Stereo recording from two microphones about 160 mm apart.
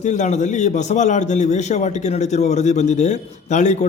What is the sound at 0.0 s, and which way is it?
A man's voice, 45° left (ahead or behind).